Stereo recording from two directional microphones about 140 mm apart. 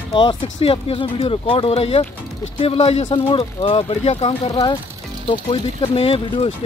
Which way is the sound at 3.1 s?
40° left (ahead or behind).